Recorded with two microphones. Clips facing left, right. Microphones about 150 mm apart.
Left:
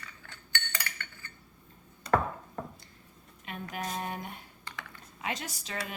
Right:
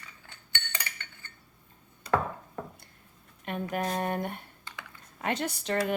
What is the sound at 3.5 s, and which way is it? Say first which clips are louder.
Speech: right 6 dB; 55° right (ahead or behind).